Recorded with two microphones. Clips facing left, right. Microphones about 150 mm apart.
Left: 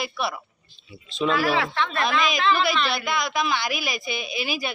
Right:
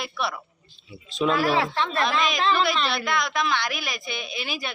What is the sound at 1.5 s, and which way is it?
Speech, 35° right (ahead or behind).